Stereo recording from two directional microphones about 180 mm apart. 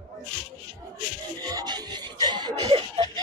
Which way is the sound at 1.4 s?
20° right (ahead or behind).